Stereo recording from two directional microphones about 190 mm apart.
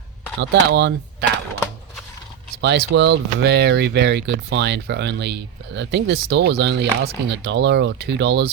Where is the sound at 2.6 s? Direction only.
70° right (ahead or behind).